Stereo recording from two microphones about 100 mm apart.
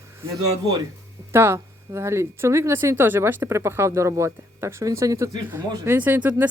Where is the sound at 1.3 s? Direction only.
25° right (ahead or behind).